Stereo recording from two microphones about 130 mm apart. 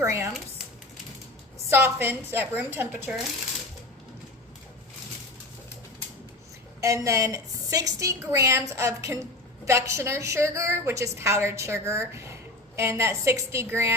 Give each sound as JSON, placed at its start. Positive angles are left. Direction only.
{"t": 0.0, "sound": "speech", "side_deg": -20}
{"t": 1.7, "sound": "speech", "side_deg": -15}
{"t": 6.8, "sound": "a woman's voice", "side_deg": -25}